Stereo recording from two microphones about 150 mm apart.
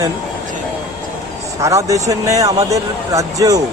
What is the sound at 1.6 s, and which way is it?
Speech, 20° right (ahead or behind).